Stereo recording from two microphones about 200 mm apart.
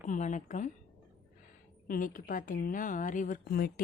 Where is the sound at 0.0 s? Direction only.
40° left (ahead or behind).